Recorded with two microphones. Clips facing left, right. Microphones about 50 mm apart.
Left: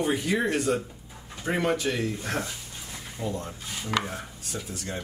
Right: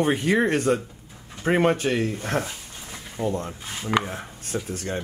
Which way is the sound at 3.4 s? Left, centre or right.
Right.